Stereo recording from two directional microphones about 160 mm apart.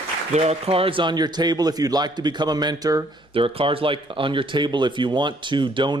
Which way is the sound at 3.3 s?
35° right (ahead or behind).